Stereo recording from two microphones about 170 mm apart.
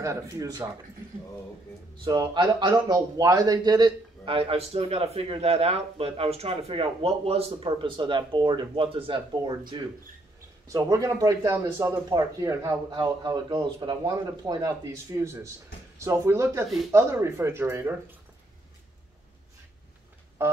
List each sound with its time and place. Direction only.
0.0 s speech: 20° right (ahead or behind)
2.0 s a man's voice: 25° right (ahead or behind)